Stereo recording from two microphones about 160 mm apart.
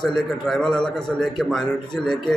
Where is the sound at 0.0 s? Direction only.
Centre (ahead or behind).